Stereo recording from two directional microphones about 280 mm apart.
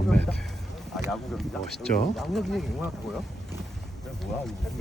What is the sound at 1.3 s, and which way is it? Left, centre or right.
Speech, centre.